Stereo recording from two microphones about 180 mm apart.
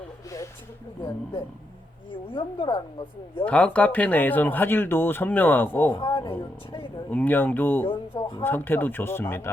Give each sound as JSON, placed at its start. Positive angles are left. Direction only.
{"t": 2.0, "sound": "speech", "side_deg": 25}
{"t": 3.4, "sound": "speech", "side_deg": 5}
{"t": 5.9, "sound": "speech", "side_deg": 25}
{"t": 7.1, "sound": "speech", "side_deg": 10}
{"t": 7.9, "sound": "speech", "side_deg": 30}
{"t": 8.4, "sound": "speech", "side_deg": 10}